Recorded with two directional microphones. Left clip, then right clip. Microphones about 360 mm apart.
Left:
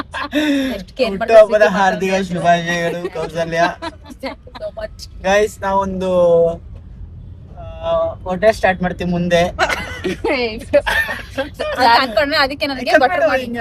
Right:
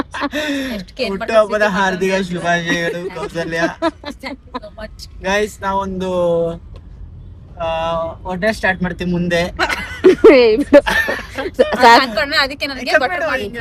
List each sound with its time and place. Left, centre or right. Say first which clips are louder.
0.1 s speech: left 2 dB; centre
4.8 s speech: left 3 dB; centre
7.6 s speech: even; centre
10.0 s speech: right 14 dB; right
10.8 s speech: right 1 dB; centre
11.9 s speech: even; centre